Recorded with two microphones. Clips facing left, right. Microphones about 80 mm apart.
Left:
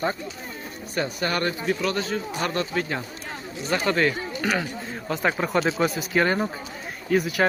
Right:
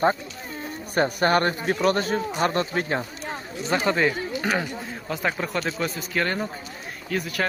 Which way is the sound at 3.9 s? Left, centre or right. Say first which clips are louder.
Left 1 dB; centre.